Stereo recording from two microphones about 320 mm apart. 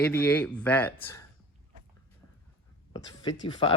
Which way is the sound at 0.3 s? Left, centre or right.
Centre.